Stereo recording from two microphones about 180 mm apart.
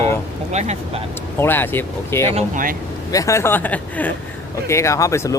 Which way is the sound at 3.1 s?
15° left (ahead or behind).